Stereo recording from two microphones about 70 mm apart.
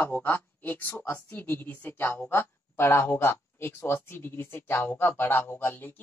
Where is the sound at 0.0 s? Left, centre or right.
Left.